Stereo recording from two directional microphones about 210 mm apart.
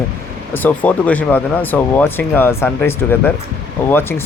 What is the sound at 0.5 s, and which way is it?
Speech, 10° left (ahead or behind).